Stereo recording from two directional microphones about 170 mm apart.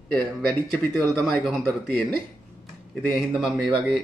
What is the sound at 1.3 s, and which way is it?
Speech, centre (ahead or behind).